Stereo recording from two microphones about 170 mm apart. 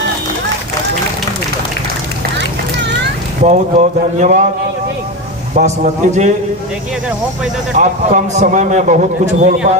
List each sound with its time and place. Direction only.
3.4 s a man's voice: 45° right (ahead or behind)
5.5 s a man's voice: 45° right (ahead or behind)
7.8 s a man's voice: 45° right (ahead or behind)